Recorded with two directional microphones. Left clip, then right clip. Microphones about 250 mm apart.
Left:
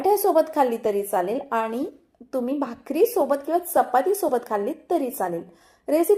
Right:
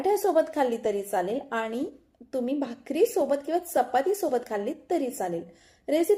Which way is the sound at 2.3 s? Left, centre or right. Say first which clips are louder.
Left 3 dB; left.